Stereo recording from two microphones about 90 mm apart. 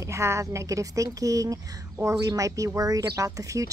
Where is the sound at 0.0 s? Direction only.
30° right (ahead or behind).